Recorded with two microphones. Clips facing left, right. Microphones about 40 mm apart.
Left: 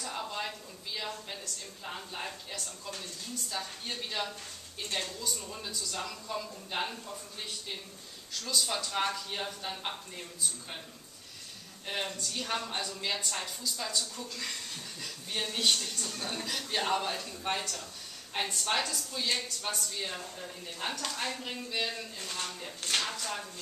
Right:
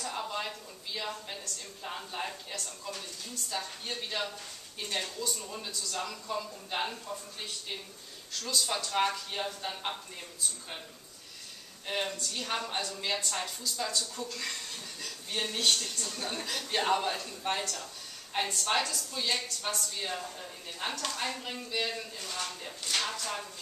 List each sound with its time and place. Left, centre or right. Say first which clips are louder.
0.0 s a sound: right 1 dB; centre
0.9 s a woman's voice: right 1 dB; centre
8.3 s speech: even; centre
11.8 s speech: right 2 dB; centre